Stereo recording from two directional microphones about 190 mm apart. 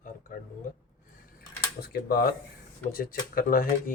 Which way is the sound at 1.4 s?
55° left (ahead or behind).